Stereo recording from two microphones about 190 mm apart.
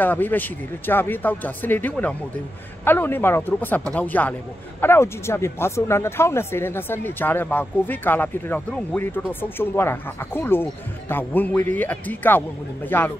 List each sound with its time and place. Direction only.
0.0 s speech: 10° left (ahead or behind)